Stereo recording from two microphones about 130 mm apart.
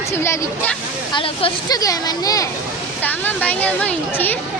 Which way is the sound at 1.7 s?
30° left (ahead or behind).